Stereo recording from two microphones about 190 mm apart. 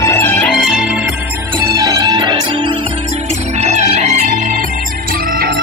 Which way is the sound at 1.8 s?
20° right (ahead or behind).